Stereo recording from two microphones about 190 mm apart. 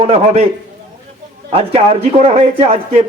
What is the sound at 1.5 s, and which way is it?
A man's voice, 30° right (ahead or behind).